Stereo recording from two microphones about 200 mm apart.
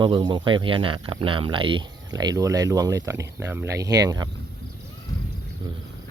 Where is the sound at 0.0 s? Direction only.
25° right (ahead or behind).